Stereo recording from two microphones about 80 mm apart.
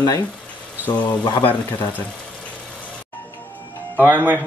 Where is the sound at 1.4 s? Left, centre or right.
Left.